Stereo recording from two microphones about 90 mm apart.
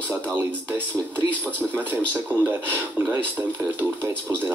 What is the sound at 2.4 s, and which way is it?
Speech, 25° right (ahead or behind).